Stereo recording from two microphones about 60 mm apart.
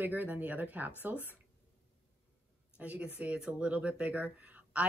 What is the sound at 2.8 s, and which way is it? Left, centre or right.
Speech, right.